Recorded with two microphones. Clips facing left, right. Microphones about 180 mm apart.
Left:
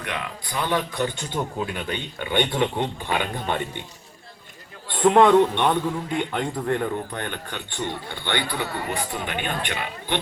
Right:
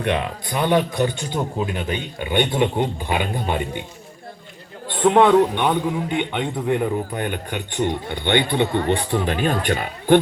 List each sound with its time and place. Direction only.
0.0 s speech: 25° right (ahead or behind); by 3.8 s 10° right (ahead or behind)
4.9 s a man's voice: centre (ahead or behind); by 10.2 s 40° right (ahead or behind)